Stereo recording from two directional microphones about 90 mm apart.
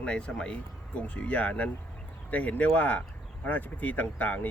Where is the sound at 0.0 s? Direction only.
10° left (ahead or behind).